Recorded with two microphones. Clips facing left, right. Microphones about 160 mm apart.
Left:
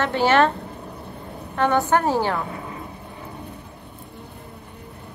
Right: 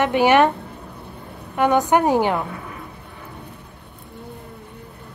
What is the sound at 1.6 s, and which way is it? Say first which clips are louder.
Speech: right 3 dB; 15° right (ahead or behind).